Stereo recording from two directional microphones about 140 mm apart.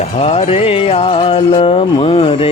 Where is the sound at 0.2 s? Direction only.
45° left (ahead or behind).